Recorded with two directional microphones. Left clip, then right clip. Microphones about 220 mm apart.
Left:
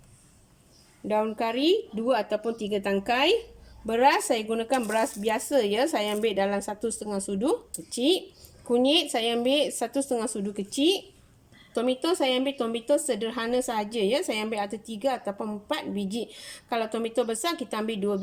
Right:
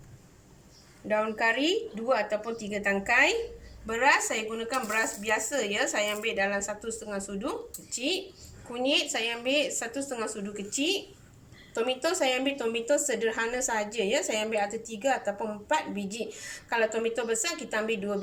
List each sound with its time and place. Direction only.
1.0 s speech: 25° left (ahead or behind)
3.8 s speech: 25° left (ahead or behind)